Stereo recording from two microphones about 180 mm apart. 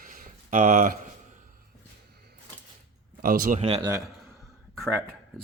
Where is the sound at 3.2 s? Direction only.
50° right (ahead or behind).